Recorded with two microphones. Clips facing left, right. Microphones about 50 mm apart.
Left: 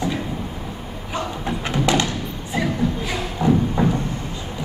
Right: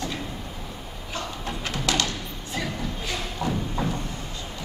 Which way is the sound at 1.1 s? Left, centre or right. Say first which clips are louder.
Left 7 dB; left.